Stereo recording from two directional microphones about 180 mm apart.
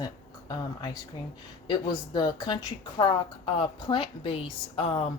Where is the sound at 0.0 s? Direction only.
20° left (ahead or behind).